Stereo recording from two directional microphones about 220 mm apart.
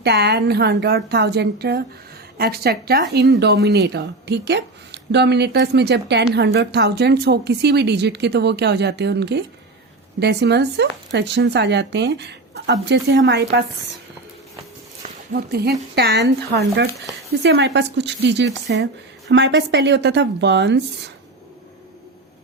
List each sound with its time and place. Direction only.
0.0 s speech: 50° right (ahead or behind)
15.3 s speech: 45° right (ahead or behind)